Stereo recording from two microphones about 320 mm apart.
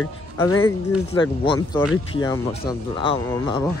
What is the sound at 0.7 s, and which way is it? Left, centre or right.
Speech, centre.